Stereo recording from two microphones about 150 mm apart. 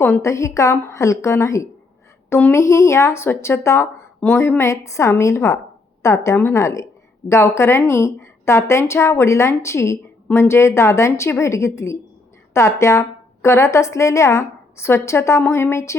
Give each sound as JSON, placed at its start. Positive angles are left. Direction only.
{"t": 0.0, "sound": "a woman's voice", "side_deg": 15}